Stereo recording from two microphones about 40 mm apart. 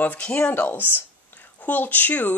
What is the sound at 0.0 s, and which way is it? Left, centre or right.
Speech, left.